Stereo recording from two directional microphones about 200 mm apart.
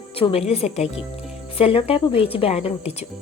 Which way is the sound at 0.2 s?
30° left (ahead or behind).